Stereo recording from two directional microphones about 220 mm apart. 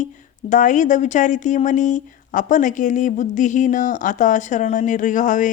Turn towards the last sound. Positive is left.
turn(degrees=35)  # may be behind; listen again after turning